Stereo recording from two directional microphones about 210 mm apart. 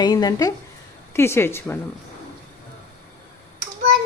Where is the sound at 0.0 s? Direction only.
20° left (ahead or behind).